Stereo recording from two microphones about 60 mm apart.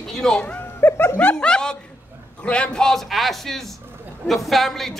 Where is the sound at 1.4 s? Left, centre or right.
Centre.